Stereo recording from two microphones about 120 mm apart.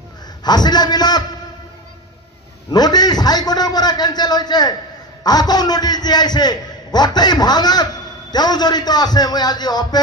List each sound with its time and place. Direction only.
0.4 s a man's voice: 35° left (ahead or behind)
2.7 s a man's voice: 35° left (ahead or behind)